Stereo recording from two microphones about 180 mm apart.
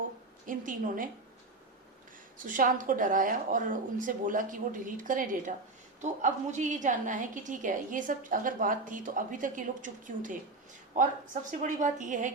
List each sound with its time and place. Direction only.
0.4 s a woman's voice: 45° right (ahead or behind)
2.5 s a woman's voice: 45° right (ahead or behind)